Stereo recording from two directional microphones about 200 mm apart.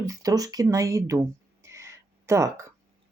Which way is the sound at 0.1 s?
15° right (ahead or behind).